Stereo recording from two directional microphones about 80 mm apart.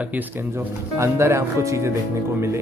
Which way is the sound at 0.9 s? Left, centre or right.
Right.